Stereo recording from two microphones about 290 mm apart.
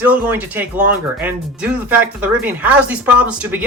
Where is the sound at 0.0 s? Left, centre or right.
Centre.